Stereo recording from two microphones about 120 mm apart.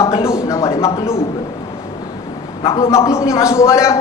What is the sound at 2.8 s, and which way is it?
A man's voice, 25° left (ahead or behind).